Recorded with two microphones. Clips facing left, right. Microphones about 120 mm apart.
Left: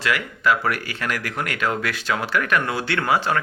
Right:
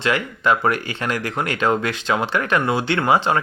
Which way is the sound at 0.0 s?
25° right (ahead or behind).